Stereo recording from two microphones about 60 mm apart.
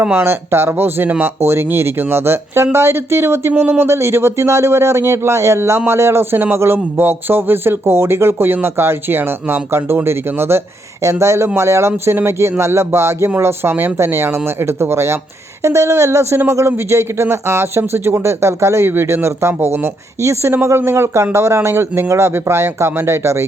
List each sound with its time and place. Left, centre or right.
0.0 s speech: right
3.6 s speech: right
3.8 s speech: right
11.0 s speech: right
18.9 s speech: right